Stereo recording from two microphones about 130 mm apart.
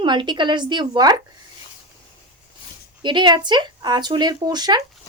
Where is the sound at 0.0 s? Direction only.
35° right (ahead or behind).